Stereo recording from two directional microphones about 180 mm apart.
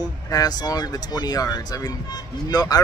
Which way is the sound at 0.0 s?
20° left (ahead or behind).